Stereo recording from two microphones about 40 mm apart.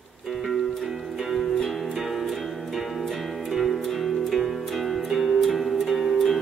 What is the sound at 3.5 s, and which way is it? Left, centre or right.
Music, centre.